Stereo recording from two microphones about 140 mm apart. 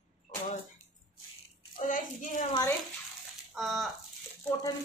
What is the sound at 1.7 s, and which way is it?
Speech, 70° left (ahead or behind).